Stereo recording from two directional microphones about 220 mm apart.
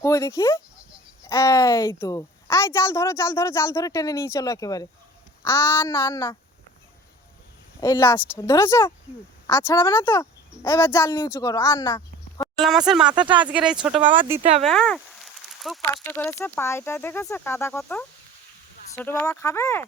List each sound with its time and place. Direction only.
0.0 s a woman's voice: 15° left (ahead or behind)
7.8 s a woman's voice: 15° left (ahead or behind)
12.6 s speech: centre (ahead or behind)
13.1 s speech: 20° right (ahead or behind)
13.4 s speech: 5° right (ahead or behind)
14.0 s speech: 20° right (ahead or behind)
14.6 s a sound: centre (ahead or behind)
16.0 s a woman's voice: 10° left (ahead or behind)